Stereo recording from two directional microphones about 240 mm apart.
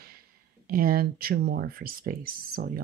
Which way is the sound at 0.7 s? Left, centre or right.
Right.